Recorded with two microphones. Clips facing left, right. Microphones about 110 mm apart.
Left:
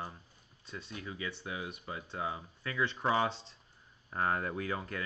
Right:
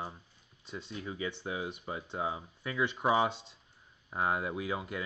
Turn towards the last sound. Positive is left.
turn(degrees=-10)  # may be behind; listen again after turning